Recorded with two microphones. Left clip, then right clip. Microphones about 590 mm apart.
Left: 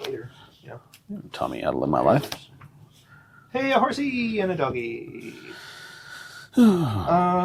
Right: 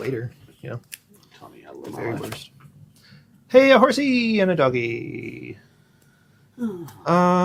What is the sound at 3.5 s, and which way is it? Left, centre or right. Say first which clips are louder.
Speech: right 8 dB; right.